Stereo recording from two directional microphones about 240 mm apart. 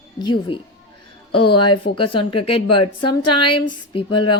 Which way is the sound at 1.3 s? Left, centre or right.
Left.